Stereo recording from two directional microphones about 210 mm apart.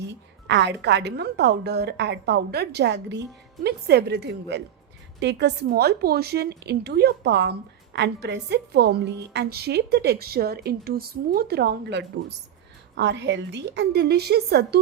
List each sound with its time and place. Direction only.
0.1 s a woman's voice: 55° right (ahead or behind)